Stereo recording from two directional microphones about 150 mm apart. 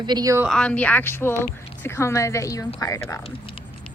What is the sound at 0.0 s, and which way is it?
Speech, 25° right (ahead or behind).